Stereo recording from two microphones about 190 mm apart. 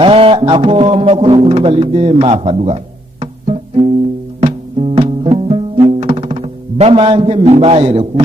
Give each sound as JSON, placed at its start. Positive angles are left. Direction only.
{"t": 0.0, "sound": "speech", "side_deg": -30}
{"t": 4.4, "sound": "music", "side_deg": -30}